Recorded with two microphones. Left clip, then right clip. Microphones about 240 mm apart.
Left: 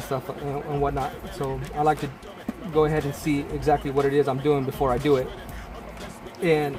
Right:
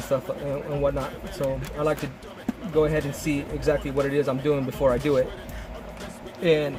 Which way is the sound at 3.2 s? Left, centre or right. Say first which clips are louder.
Left 1 dB; left.